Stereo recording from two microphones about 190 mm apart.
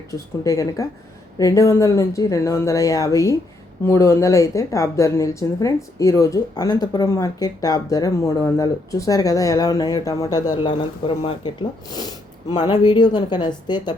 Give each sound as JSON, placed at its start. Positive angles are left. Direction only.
{"t": 0.1, "sound": "a woman's voice", "side_deg": 15}